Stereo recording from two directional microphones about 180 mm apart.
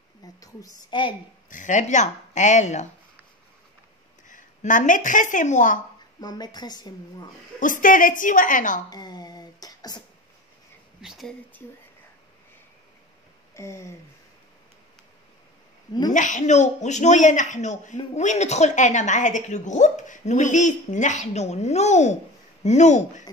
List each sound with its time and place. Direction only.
0.4 s a woman's voice: 20° left (ahead or behind)
1.5 s a woman's voice: 45° left (ahead or behind)
4.3 s speech: 45° left (ahead or behind)
6.2 s a woman's voice: 25° left (ahead or behind)
7.8 s a woman's voice: 50° left (ahead or behind)
8.9 s a sound: 20° left (ahead or behind)
11.0 s speech: centre (ahead or behind)
13.6 s a sound: 15° left (ahead or behind)
16.1 s a woman's voice: 45° left (ahead or behind)